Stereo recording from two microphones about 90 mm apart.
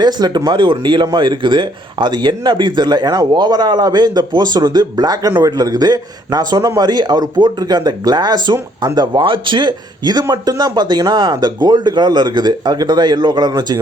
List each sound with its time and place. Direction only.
0.0 s speech: 50° right (ahead or behind)